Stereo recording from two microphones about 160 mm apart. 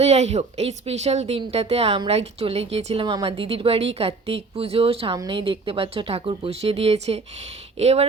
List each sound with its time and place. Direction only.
0.0 s speech: 40° right (ahead or behind)